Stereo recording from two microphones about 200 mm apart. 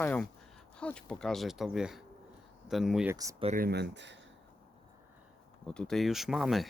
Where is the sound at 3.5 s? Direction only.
50° right (ahead or behind).